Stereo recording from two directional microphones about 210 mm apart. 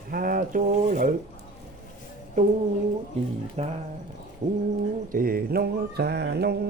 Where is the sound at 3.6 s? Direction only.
30° right (ahead or behind).